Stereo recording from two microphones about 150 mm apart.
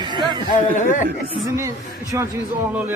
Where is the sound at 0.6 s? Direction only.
60° left (ahead or behind).